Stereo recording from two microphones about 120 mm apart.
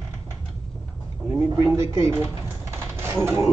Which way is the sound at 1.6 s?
25° right (ahead or behind).